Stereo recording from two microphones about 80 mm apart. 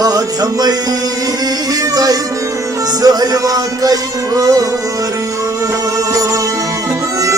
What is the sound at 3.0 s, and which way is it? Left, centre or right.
Music, right.